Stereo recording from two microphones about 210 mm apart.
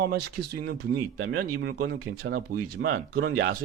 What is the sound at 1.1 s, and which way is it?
Speech, 85° right.